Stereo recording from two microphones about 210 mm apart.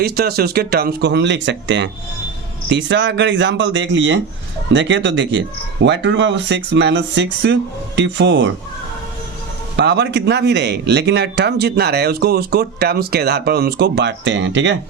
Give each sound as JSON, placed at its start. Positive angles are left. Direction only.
{"t": 0.0, "sound": "speech", "side_deg": -50}
{"t": 9.7, "sound": "speech", "side_deg": -55}